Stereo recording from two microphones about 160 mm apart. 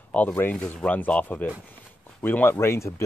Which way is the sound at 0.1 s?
10° left (ahead or behind).